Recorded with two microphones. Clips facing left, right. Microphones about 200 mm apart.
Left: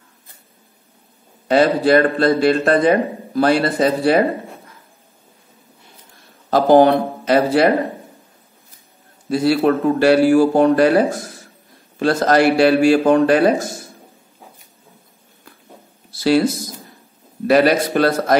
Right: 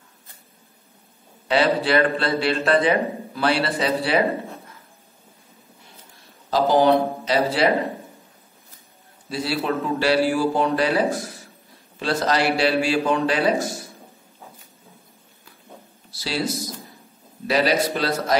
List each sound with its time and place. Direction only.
1.5 s a man's voice: 45° left (ahead or behind)
6.5 s a man's voice: 55° left (ahead or behind)
9.3 s a man's voice: 50° left (ahead or behind)
16.1 s speech: 55° left (ahead or behind)
17.5 s a man's voice: 55° left (ahead or behind)